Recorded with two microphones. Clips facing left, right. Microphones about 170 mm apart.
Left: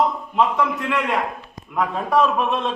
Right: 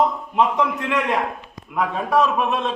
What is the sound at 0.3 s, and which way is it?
Speech, 15° right (ahead or behind).